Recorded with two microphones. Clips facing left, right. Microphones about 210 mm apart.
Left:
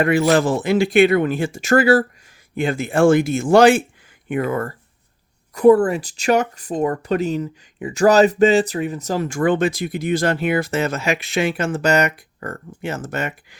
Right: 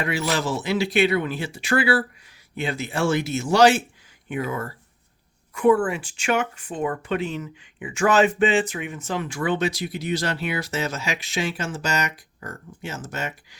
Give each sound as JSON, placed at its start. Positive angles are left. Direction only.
{"t": 0.0, "sound": "speech", "side_deg": 55}
{"t": 5.5, "sound": "speech", "side_deg": 40}